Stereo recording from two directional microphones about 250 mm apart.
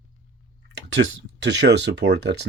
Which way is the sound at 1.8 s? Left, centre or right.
Right.